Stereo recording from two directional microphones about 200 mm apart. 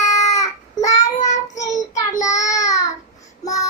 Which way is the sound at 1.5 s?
35° left (ahead or behind).